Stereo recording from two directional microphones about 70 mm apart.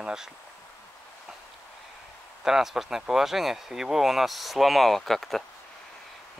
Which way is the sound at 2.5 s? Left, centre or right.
Centre.